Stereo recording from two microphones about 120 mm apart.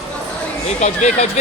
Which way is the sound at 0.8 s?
70° left (ahead or behind).